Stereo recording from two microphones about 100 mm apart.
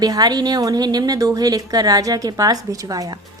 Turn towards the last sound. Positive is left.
turn(degrees=-40)  # may be behind; listen again after turning